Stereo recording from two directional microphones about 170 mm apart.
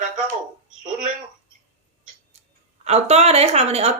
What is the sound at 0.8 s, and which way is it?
Speech, 50° right (ahead or behind).